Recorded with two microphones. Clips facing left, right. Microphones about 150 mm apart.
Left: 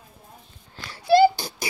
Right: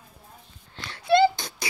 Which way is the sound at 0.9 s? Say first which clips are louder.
Left 3 dB; 5° left (ahead or behind).